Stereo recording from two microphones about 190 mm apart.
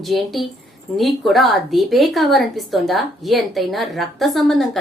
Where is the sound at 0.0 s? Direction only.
Centre (ahead or behind).